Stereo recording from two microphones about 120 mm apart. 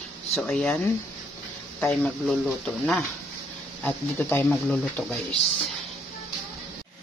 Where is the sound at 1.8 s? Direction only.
10° left (ahead or behind).